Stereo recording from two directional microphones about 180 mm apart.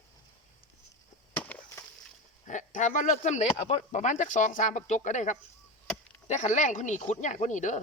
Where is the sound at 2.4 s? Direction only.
45° left (ahead or behind).